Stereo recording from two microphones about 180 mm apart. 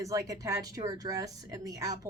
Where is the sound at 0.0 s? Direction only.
20° right (ahead or behind).